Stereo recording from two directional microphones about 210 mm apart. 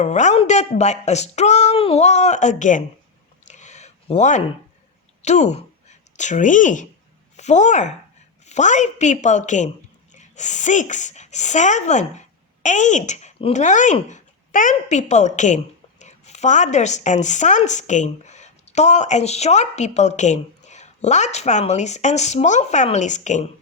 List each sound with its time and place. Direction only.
0.0 s a woman's voice: 35° left (ahead or behind)
3.4 s a sound: 35° left (ahead or behind)
5.2 s a woman's voice: 30° left (ahead or behind)